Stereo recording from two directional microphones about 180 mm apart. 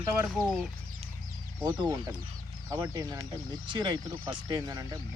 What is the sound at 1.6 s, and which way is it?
Speech, 20° right (ahead or behind).